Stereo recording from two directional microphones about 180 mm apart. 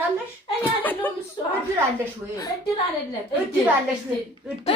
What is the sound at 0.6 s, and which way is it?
Speech, 10° left (ahead or behind).